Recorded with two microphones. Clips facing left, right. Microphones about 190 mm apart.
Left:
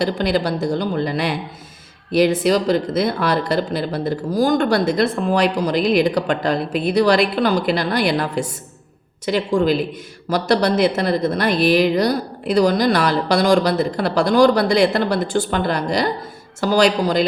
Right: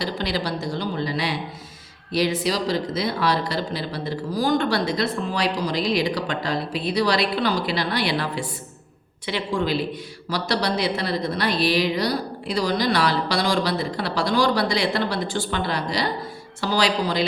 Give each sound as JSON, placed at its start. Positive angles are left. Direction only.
{"t": 0.0, "sound": "speech", "side_deg": 50}